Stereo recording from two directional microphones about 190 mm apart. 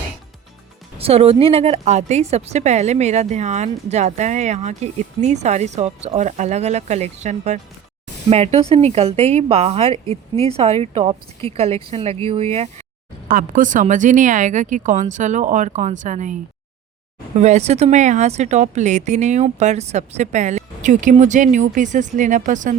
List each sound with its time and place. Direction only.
0.9 s a woman's voice: 30° right (ahead or behind)
13.2 s a woman's voice: 45° right (ahead or behind)